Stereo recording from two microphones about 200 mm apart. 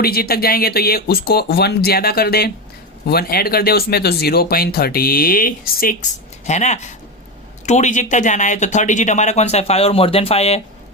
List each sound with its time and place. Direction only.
0.0 s speech: 50° left (ahead or behind); by 10.6 s 30° left (ahead or behind)